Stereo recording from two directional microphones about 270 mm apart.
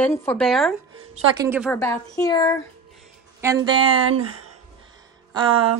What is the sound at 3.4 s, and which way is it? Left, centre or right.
Speech, centre.